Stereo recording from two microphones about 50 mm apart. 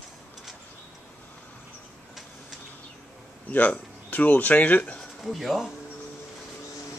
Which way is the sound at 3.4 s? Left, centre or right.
Left.